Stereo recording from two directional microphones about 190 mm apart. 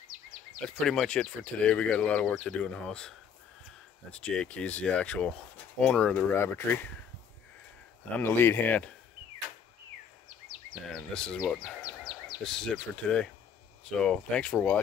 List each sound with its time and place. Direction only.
0.7 s speech: centre (ahead or behind)
8.2 s speech: 10° left (ahead or behind)
10.9 s speech: 5° left (ahead or behind)